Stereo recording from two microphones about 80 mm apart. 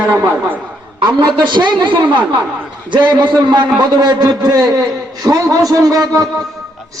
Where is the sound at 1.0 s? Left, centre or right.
Right.